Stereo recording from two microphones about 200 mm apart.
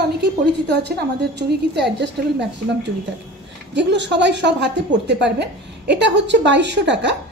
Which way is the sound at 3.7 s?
60° right (ahead or behind).